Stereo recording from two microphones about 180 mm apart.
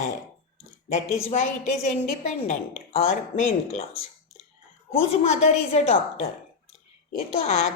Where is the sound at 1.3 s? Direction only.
45° left (ahead or behind).